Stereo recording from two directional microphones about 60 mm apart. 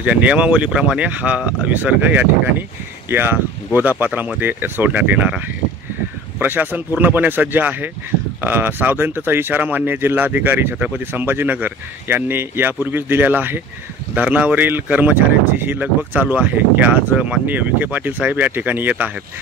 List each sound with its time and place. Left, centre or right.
0.0 s speech: right
6.4 s speech: right
15.1 s speech: right